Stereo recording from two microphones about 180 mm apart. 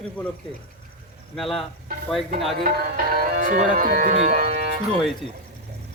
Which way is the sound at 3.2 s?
50° right (ahead or behind).